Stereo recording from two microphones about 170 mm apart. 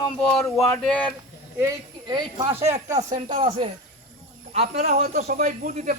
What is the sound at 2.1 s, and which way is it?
Speech, 30° right (ahead or behind).